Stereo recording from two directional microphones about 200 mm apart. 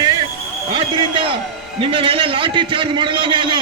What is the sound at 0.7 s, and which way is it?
A man's voice, 25° right (ahead or behind).